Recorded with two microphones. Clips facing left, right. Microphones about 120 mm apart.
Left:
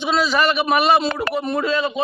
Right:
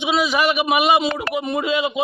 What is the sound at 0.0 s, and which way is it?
A man's voice, 15° right (ahead or behind).